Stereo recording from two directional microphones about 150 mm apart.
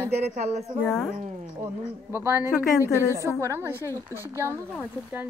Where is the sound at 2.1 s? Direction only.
15° right (ahead or behind).